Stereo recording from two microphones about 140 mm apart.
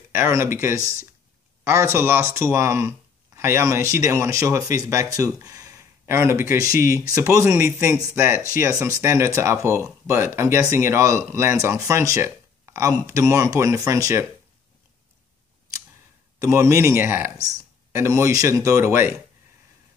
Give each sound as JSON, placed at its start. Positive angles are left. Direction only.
{"t": 0.1, "sound": "speech", "side_deg": -20}
{"t": 16.3, "sound": "speech", "side_deg": -20}